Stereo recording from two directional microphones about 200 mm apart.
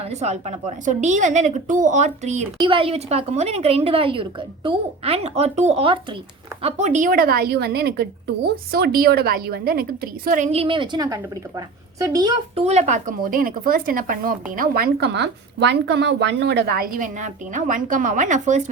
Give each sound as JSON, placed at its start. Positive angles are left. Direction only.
{"t": 0.0, "sound": "a woman's voice", "side_deg": -35}
{"t": 12.6, "sound": "a woman's voice", "side_deg": -35}